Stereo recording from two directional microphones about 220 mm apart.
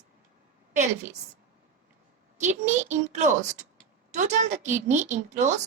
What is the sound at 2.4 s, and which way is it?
A woman's voice, 35° right (ahead or behind).